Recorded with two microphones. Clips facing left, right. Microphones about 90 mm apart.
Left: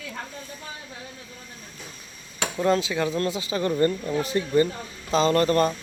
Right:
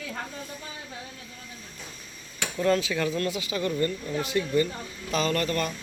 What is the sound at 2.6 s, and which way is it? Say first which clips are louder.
Speech: left 2 dB; 25° left (ahead or behind).